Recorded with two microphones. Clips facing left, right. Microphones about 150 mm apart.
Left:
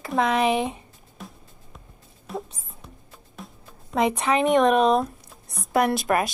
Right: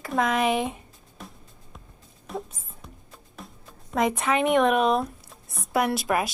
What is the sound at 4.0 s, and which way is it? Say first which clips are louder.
Speech: left 2 dB; 30° left (ahead or behind).